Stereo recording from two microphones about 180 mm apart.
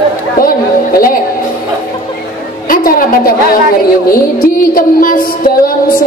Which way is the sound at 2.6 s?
50° left (ahead or behind).